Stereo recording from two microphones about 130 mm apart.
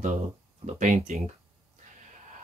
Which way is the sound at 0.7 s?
70° right (ahead or behind).